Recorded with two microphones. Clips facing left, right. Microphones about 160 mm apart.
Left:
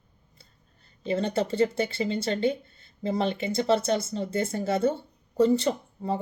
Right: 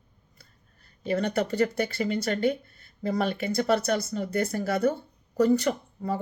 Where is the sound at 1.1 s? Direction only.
25° left (ahead or behind).